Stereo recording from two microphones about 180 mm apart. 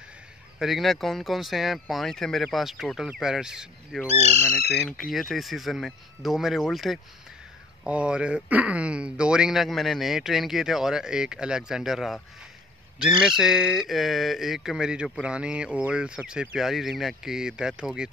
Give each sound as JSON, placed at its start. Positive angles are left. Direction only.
{"t": 0.6, "sound": "speech", "side_deg": 0}
{"t": 4.1, "sound": "speech", "side_deg": -40}
{"t": 4.7, "sound": "speech", "side_deg": 5}
{"t": 13.4, "sound": "speech", "side_deg": 0}